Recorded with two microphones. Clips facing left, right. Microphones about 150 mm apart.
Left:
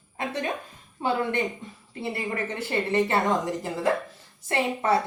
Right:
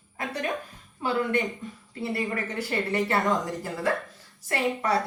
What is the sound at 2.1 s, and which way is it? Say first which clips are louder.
A woman's voice: right 1 dB; 25° left (ahead or behind).